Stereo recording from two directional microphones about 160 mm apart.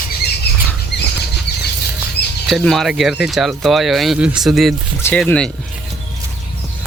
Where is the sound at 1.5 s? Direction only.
90° left.